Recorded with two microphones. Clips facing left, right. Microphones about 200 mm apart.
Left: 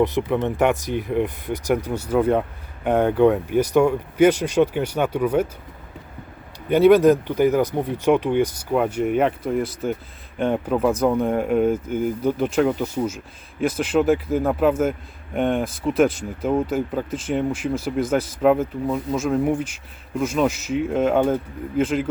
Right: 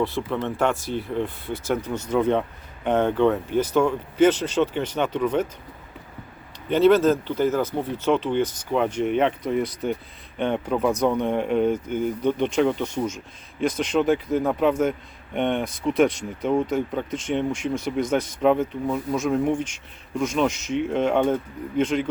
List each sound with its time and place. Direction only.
0.0 s speech: 20° left (ahead or behind)
6.7 s speech: 10° left (ahead or behind)